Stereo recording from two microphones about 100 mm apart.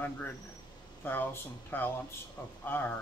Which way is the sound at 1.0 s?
20° left (ahead or behind).